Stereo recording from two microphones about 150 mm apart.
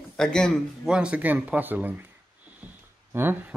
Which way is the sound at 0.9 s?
5° right (ahead or behind).